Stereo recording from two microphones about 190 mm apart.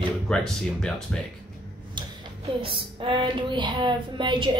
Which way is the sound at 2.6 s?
25° right (ahead or behind).